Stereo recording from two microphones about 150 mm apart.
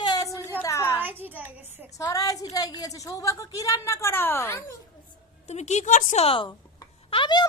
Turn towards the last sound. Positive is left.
turn(degrees=35)  # may be behind; listen again after turning